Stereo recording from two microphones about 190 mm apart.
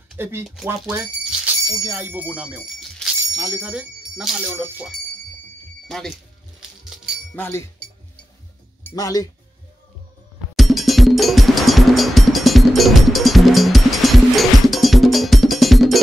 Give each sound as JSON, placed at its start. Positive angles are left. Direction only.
{"t": 0.1, "sound": "speech", "side_deg": -10}
{"t": 0.7, "sound": "bicycle bell", "side_deg": -5}
{"t": 1.7, "sound": "speech", "side_deg": -15}
{"t": 7.3, "sound": "speech", "side_deg": 10}
{"t": 8.8, "sound": "speech", "side_deg": 20}
{"t": 10.5, "sound": "music", "side_deg": 0}